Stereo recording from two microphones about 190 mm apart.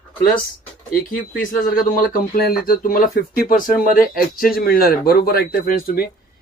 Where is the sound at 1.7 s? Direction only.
50° left (ahead or behind).